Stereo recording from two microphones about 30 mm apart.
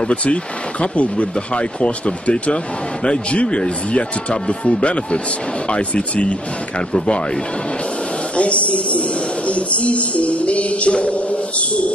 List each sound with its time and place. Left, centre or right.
0.1 s speech: left
8.4 s music: left